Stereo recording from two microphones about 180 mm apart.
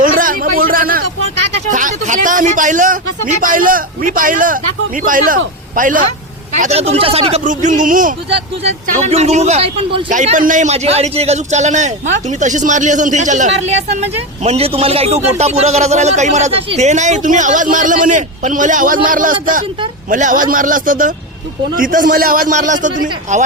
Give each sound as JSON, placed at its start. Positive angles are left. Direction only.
{"t": 0.0, "sound": "a sound", "side_deg": -50}
{"t": 1.7, "sound": "a man's voice", "side_deg": -45}
{"t": 6.6, "sound": "speech", "side_deg": -35}
{"t": 8.3, "sound": "a man's voice", "side_deg": -35}